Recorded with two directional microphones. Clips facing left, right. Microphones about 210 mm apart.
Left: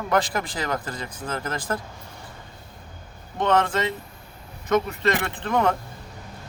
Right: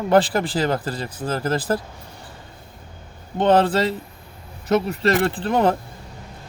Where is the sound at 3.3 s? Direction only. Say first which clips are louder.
Right 5 dB; 35° right (ahead or behind).